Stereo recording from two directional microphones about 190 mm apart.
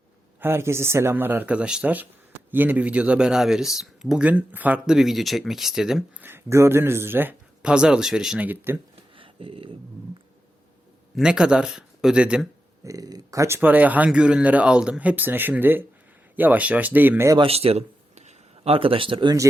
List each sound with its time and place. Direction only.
0.3 s speech: 10° right (ahead or behind)
9.1 s a sound: 30° right (ahead or behind)
11.2 s speech: 5° right (ahead or behind)
12.8 s speech: 20° right (ahead or behind)
17.3 s speech: 30° right (ahead or behind)